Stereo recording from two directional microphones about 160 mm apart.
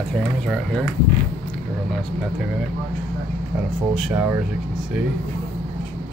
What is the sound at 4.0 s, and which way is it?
Speech, 10° right (ahead or behind).